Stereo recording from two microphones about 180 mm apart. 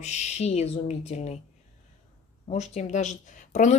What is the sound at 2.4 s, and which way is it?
Speech, 40° left (ahead or behind).